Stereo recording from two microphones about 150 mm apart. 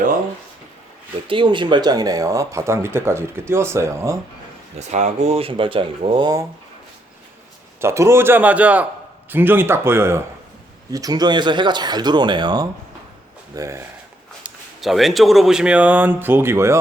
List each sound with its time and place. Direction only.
1.3 s speech: 35° right (ahead or behind)
4.8 s speech: 50° right (ahead or behind); by 6.5 s 25° right (ahead or behind)
7.8 s speech: 20° right (ahead or behind)
13.6 s speech: 20° right (ahead or behind)
14.4 s speech: centre (ahead or behind); by 16.7 s 15° right (ahead or behind)